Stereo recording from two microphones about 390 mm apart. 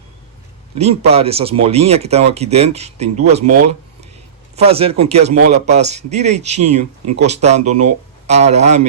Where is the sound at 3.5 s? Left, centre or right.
Right.